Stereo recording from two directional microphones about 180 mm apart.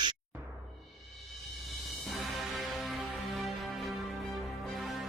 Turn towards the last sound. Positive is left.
turn(degrees=0)  # may be behind; listen again after turning